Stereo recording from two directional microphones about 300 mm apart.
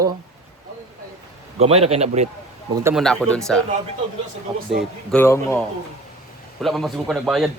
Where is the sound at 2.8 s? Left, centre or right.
Centre.